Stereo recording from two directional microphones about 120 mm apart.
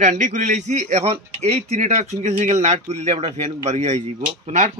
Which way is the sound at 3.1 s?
45° right (ahead or behind).